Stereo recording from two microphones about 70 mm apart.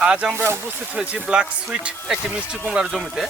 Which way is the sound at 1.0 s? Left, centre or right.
Centre.